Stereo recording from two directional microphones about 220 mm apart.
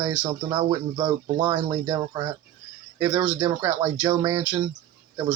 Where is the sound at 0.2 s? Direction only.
20° right (ahead or behind).